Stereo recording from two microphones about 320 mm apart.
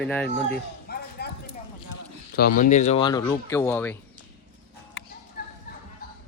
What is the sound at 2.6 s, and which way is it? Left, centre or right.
Speech, left.